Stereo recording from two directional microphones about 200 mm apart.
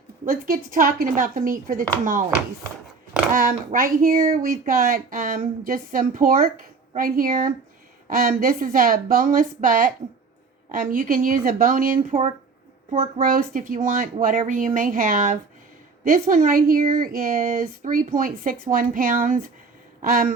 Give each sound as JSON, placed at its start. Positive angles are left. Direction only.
{"t": 0.3, "sound": "speech", "side_deg": -45}
{"t": 3.3, "sound": "speech", "side_deg": -40}
{"t": 20.0, "sound": "a sound", "side_deg": -45}